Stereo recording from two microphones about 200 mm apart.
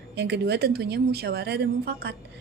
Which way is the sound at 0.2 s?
55° right (ahead or behind).